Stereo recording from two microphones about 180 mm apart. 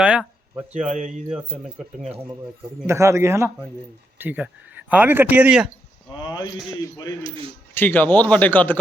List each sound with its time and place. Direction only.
0.0 s a sound: 5° right (ahead or behind)
0.9 s speech: 45° right (ahead or behind)
2.8 s speech: 15° right (ahead or behind)
6.1 s speech: 25° left (ahead or behind)
7.7 s a man's voice: 10° left (ahead or behind)